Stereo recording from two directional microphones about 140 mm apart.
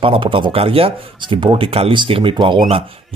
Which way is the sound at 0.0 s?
40° right (ahead or behind).